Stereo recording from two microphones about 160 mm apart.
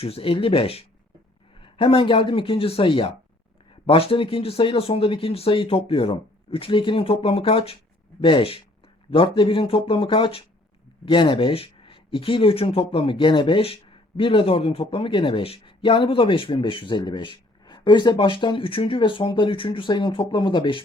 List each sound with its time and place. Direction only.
0.0 s speech: 35° left (ahead or behind)